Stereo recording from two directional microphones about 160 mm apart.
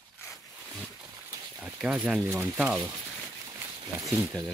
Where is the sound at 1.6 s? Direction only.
5° right (ahead or behind).